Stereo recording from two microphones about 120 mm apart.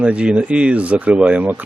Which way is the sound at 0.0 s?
10° right (ahead or behind).